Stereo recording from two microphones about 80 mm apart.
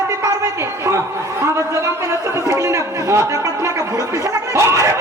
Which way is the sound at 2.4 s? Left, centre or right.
Right.